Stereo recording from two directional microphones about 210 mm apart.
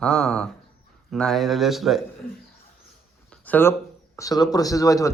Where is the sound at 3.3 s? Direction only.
10° left (ahead or behind).